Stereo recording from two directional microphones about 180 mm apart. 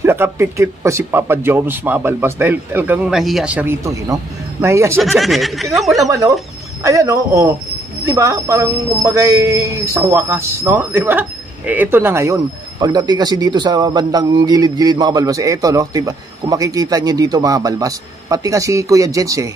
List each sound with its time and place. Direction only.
0.0 s speech: 15° right (ahead or behind)
5.0 s speech: centre (ahead or behind)
6.0 s speech: 20° right (ahead or behind)